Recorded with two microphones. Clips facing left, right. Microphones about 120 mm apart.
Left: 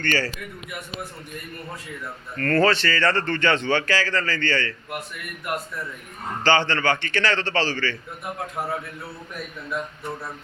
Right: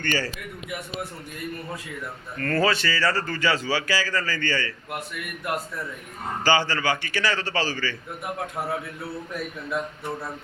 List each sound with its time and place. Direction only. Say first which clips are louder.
0.0 s a man's voice: left 2 dB; 15° right (ahead or behind)
2.4 s a man's voice: left 3 dB; 10° right (ahead or behind)
6.4 s a man's voice: left 2 dB; 10° right (ahead or behind)